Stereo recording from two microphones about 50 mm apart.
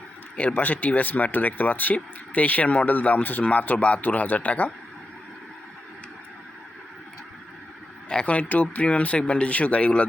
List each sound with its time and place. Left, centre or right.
0.5 s speech: left
8.1 s speech: left